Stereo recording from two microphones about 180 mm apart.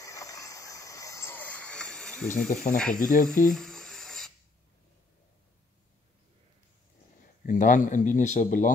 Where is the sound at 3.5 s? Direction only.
5° left (ahead or behind).